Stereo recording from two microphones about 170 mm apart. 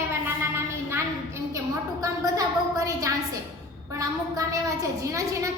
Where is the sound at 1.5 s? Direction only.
20° right (ahead or behind).